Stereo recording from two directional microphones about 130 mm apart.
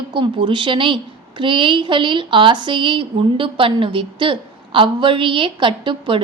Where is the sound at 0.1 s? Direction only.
40° right (ahead or behind).